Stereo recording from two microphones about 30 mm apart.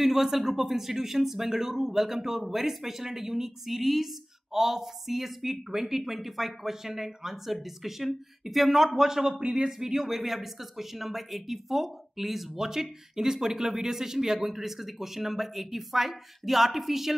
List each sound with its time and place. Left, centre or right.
0.0 s a man's voice: centre
9.4 s speech: right
9.7 s a man's voice: centre
9.9 s a man's voice: centre